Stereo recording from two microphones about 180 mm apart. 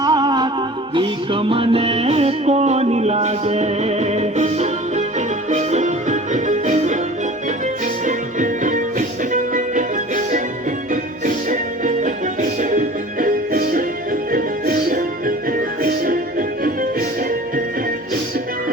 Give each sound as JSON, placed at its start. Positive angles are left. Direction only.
{"t": 0.0, "sound": "music", "side_deg": -20}
{"t": 8.0, "sound": "music", "side_deg": -45}